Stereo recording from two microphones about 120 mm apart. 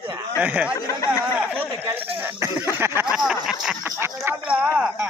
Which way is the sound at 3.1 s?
5° right (ahead or behind).